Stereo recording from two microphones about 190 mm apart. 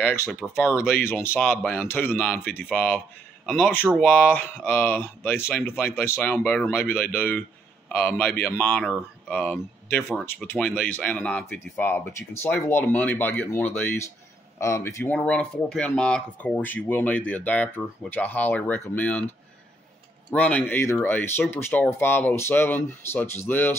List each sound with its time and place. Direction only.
0.0 s speech: 15° left (ahead or behind)
20.2 s speech: 5° left (ahead or behind)